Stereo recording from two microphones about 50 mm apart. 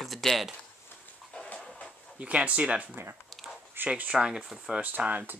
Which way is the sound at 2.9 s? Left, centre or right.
Right.